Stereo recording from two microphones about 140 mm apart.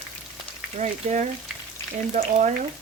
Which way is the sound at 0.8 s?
60° right (ahead or behind).